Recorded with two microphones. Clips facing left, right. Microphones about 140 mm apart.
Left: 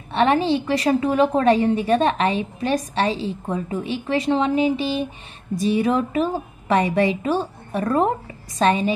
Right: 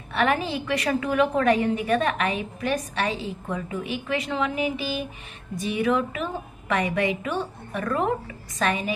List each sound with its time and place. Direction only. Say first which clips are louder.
0.1 s a woman's voice: left 6 dB; 30° left (ahead or behind)